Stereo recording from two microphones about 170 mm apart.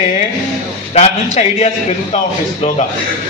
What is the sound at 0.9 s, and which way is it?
A man's voice, 35° left (ahead or behind).